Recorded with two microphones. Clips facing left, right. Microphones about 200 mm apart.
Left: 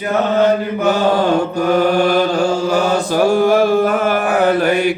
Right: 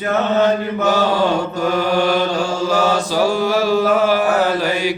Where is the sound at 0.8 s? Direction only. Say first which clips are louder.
Left 2 dB; 55° left (ahead or behind).